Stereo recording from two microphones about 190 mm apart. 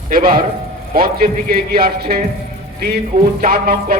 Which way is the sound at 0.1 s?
50° right (ahead or behind).